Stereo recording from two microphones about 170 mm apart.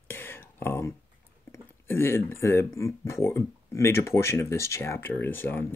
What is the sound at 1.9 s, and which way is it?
Speech, 15° left (ahead or behind).